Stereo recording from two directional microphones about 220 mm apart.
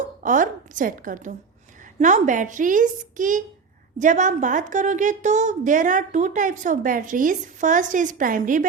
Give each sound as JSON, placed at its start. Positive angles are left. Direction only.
{"t": 0.2, "sound": "a woman's voice", "side_deg": -35}